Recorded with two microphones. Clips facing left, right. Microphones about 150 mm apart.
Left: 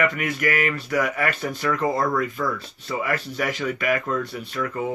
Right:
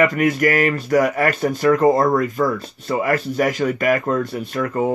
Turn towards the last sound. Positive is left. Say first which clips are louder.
# right 6 dB
turn(degrees=-45)  # may be behind; listen again after turning